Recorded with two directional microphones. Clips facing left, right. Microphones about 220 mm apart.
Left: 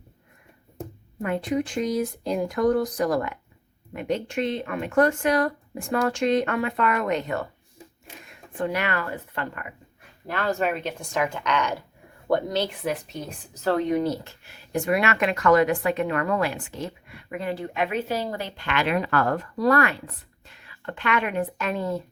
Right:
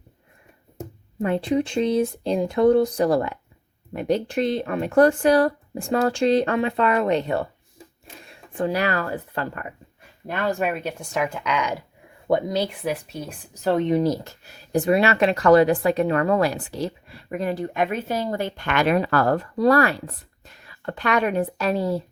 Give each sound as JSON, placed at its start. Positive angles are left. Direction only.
{"t": 1.2, "sound": "speech", "side_deg": -30}
{"t": 10.2, "sound": "speech", "side_deg": -15}
{"t": 14.0, "sound": "speech", "side_deg": -40}